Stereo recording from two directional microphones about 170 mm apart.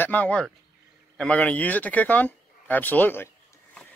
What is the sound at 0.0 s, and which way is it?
Speech, 10° left (ahead or behind).